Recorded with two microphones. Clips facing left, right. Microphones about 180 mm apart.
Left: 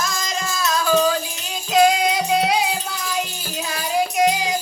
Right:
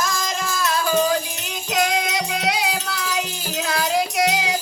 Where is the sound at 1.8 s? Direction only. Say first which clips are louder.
Left 6 dB; 75° right (ahead or behind).